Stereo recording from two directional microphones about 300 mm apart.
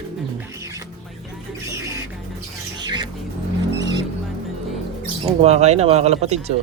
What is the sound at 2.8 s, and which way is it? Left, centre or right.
Music, centre.